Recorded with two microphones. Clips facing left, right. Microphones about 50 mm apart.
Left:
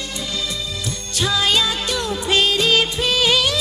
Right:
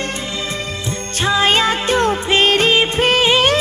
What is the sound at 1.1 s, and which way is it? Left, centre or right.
Music, right.